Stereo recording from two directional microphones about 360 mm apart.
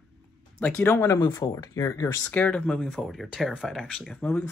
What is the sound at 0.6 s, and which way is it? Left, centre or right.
Speech, centre.